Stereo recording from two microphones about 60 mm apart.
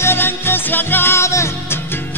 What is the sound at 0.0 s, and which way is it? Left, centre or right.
Music, left.